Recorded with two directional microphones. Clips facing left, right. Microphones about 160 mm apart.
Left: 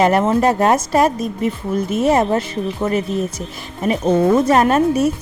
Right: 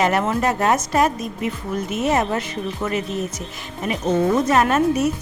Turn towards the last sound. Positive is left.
turn(degrees=30)  # may be behind; listen again after turning